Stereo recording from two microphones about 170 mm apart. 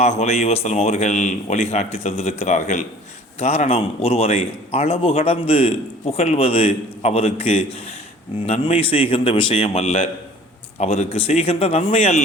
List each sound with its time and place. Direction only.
0.0 s a man's voice: 40° left (ahead or behind)